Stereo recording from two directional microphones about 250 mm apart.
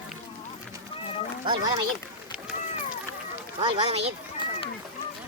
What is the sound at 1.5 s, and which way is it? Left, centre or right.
Speech, centre.